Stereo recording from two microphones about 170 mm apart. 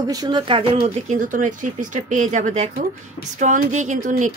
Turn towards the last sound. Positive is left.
turn(degrees=-45)  # may be behind; listen again after turning